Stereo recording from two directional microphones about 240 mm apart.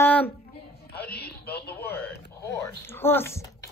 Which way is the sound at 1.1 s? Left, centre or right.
Left.